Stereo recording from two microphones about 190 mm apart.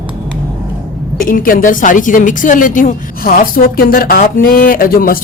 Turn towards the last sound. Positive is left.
turn(degrees=50)  # may be behind; listen again after turning